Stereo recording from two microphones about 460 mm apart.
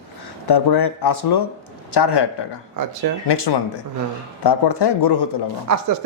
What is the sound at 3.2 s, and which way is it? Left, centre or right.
Speech, left.